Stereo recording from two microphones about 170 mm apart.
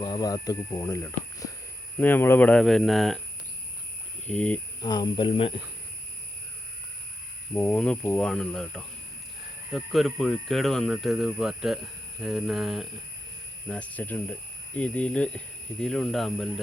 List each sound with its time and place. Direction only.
0.0 s speech: 25° left (ahead or behind); by 3.2 s centre (ahead or behind)
4.3 s speech: 10° left (ahead or behind)
4.8 s speech: 25° left (ahead or behind)
7.5 s speech: 10° left (ahead or behind)